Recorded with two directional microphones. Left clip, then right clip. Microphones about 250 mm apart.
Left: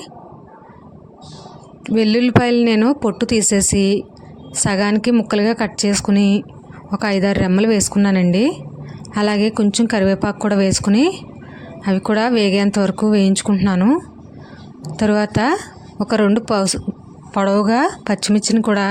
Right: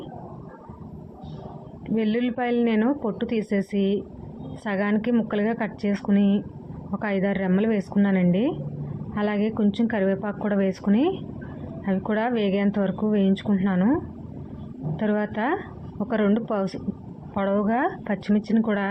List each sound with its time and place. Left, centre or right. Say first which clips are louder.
2.0 s speech: left 10 dB; left